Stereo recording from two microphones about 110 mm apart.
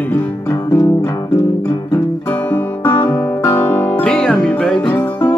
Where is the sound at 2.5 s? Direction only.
15° left (ahead or behind).